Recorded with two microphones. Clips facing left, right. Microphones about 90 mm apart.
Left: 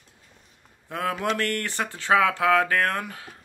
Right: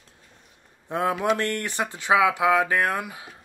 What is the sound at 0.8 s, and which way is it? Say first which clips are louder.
Speech: right 3 dB; 20° right (ahead or behind).